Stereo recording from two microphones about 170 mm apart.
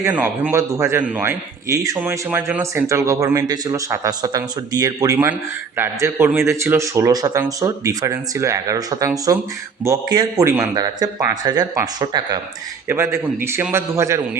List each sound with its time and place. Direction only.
0.0 s a man's voice: 10° right (ahead or behind)